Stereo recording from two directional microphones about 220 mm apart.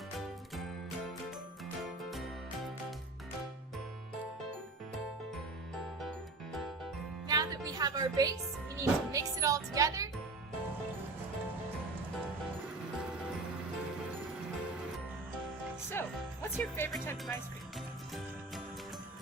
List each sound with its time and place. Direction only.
2.0 s music: centre (ahead or behind)
6.0 s music: centre (ahead or behind)
7.3 s speech: 15° right (ahead or behind)
16.0 s music: 10° left (ahead or behind)
16.6 s speech: 10° left (ahead or behind)
17.7 s music: centre (ahead or behind)